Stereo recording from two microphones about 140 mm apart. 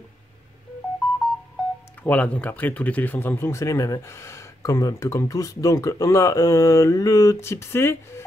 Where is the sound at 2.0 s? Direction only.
10° left (ahead or behind).